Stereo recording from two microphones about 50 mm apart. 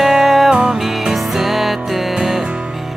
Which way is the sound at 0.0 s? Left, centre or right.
Centre.